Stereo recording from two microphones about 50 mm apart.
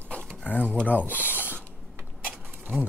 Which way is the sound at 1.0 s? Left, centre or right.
Right.